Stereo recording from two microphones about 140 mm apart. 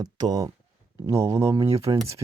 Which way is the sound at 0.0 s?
30° right (ahead or behind).